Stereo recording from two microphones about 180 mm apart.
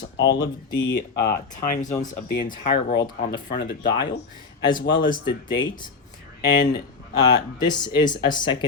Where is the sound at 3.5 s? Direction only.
70° left (ahead or behind).